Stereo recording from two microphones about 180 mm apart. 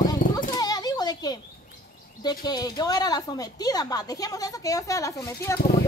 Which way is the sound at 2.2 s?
25° left (ahead or behind).